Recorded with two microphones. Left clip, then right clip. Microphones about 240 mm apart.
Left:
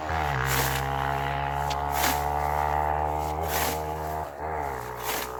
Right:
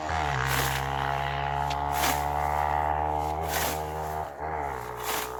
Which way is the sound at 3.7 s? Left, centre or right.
Right.